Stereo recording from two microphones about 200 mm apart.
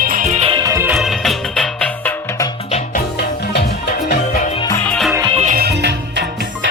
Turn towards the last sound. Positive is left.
turn(degrees=-45)  # may be behind; listen again after turning